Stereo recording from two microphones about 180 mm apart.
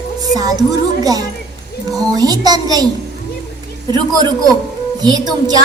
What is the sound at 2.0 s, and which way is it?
Music, 20° right (ahead or behind).